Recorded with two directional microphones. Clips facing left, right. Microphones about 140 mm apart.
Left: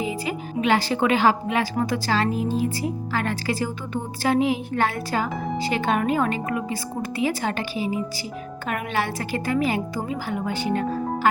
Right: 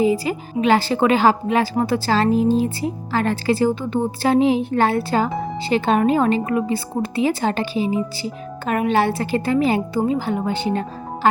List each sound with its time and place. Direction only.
0.0 s a woman's voice: 35° right (ahead or behind)